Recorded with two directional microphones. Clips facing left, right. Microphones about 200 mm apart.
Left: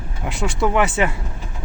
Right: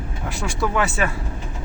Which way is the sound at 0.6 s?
20° left (ahead or behind).